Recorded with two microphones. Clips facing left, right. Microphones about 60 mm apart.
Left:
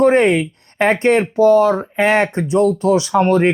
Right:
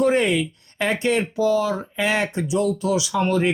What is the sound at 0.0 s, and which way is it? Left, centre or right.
Speech, left.